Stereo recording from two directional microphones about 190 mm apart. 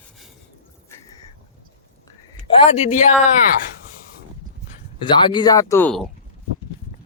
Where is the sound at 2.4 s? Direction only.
35° left (ahead or behind).